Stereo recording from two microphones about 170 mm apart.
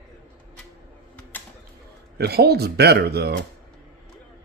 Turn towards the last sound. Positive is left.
turn(degrees=-70)  # may be behind; listen again after turning